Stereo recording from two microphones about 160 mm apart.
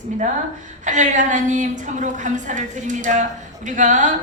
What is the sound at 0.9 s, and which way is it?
A woman's voice, 50° right (ahead or behind).